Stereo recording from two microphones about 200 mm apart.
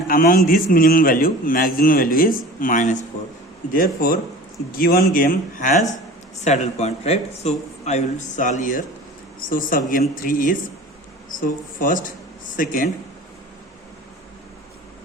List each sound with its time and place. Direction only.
0.1 s a man's voice: 45° left (ahead or behind)